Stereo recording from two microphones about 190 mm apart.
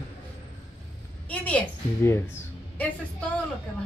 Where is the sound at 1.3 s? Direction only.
5° left (ahead or behind).